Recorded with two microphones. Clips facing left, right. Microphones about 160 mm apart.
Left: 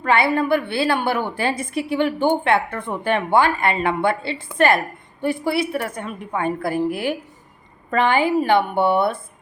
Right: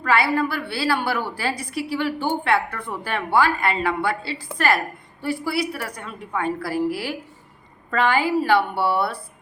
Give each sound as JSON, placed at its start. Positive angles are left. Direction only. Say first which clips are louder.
{"t": 0.0, "sound": "a woman's voice", "louder": "left 2 dB", "side_deg": 25}